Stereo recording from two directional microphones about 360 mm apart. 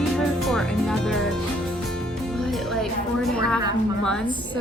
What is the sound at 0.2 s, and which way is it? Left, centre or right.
Music, centre.